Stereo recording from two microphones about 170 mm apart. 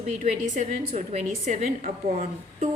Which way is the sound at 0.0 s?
45° right (ahead or behind).